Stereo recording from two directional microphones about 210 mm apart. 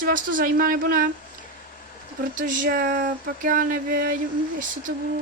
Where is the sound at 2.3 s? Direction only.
40° right (ahead or behind).